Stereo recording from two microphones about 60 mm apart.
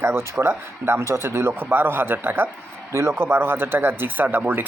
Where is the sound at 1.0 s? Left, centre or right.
Right.